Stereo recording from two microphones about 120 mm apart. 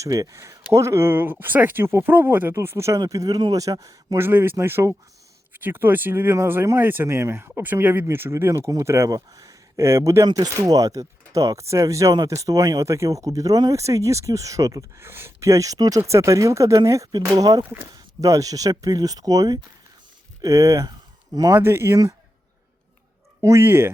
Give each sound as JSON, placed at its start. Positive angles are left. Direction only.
{"t": 0.0, "sound": "speech", "side_deg": -25}
{"t": 4.3, "sound": "speech", "side_deg": -20}
{"t": 21.6, "sound": "speech", "side_deg": -20}
{"t": 23.4, "sound": "speech", "side_deg": -20}